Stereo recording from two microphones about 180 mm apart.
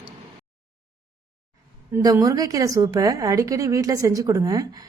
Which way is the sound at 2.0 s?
20° right (ahead or behind).